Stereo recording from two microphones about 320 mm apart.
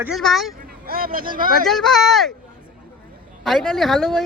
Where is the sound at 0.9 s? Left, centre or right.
Right.